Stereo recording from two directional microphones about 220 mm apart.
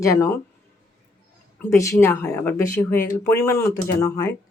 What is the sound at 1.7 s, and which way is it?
Speech, 15° left (ahead or behind).